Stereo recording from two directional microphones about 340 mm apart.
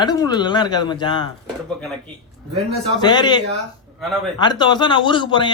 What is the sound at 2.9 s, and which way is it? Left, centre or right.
Speech, centre.